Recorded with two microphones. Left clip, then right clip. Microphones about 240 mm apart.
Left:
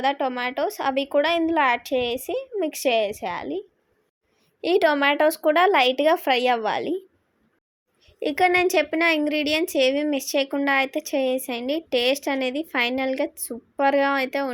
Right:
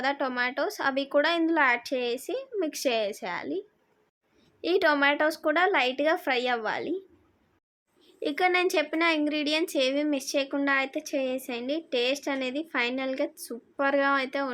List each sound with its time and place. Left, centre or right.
0.0 s a woman's voice: centre
4.6 s speech: centre
8.2 s speech: centre